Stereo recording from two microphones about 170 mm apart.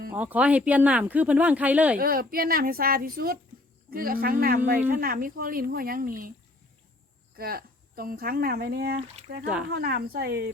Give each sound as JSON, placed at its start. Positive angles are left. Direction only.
{"t": 0.1, "sound": "speech", "side_deg": -10}
{"t": 2.0, "sound": "speech", "side_deg": -60}
{"t": 7.3, "sound": "speech", "side_deg": -60}